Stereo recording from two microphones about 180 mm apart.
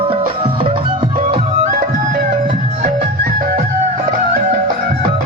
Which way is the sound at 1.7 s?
50° right (ahead or behind).